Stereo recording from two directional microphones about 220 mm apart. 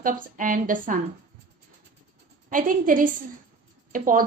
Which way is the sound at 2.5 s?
40° right (ahead or behind).